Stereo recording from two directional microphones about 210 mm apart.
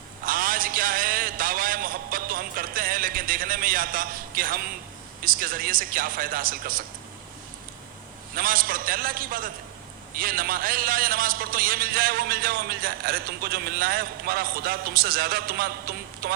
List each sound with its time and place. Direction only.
0.3 s a sound: 40° right (ahead or behind)
5.2 s a man's voice: 40° right (ahead or behind)
8.4 s a man's voice: 40° right (ahead or behind)